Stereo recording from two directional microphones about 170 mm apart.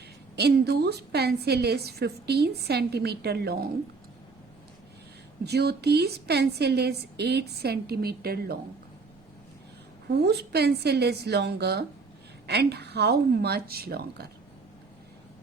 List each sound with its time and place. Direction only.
0.3 s a woman's voice: 75° right (ahead or behind)
5.5 s a woman's voice: 75° right (ahead or behind)
10.1 s a woman's voice: 75° right (ahead or behind)